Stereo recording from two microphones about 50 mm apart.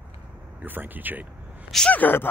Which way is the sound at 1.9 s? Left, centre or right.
Left.